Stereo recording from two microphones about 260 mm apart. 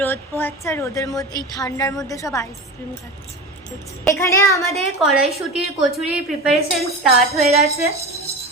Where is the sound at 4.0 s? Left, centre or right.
Centre.